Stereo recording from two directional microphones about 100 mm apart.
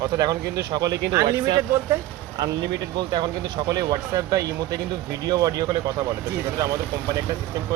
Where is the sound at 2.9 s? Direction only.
50° right (ahead or behind).